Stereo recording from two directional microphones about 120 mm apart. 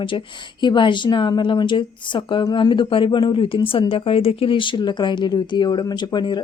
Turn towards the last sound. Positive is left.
turn(degrees=40)  # may be behind; listen again after turning